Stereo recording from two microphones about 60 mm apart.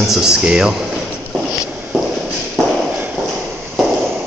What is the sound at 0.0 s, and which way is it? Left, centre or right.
Speech, centre.